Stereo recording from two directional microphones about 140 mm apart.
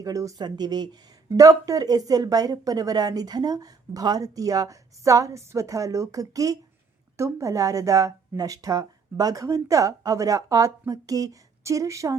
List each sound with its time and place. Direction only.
0.0 s speech: 25° right (ahead or behind)